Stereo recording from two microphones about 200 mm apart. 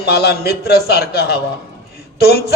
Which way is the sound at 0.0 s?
55° left (ahead or behind).